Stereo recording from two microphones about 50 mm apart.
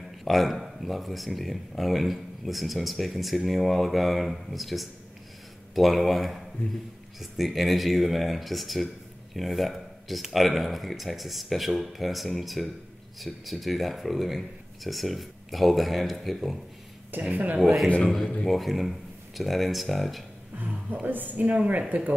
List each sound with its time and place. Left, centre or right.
0.2 s speech: centre
17.2 s speech: right
18.0 s a man's voice: centre
20.5 s speech: right